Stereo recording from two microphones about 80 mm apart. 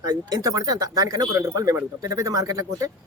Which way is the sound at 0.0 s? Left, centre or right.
Right.